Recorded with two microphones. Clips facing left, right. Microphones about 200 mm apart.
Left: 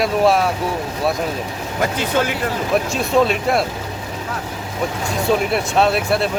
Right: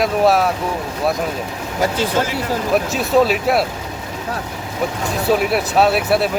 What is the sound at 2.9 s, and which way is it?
Speech, 5° right (ahead or behind).